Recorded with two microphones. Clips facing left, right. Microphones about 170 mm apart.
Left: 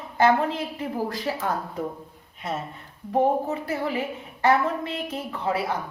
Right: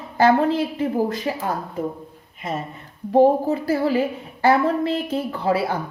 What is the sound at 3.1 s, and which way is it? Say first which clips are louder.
A woman's voice: right 7 dB; 30° right (ahead or behind).